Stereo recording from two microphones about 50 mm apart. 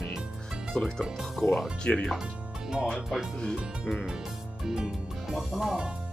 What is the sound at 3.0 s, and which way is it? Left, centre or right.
Speech, centre.